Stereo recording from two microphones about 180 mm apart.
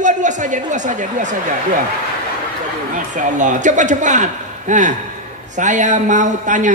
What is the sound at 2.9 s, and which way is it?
A man's voice, 45° right (ahead or behind).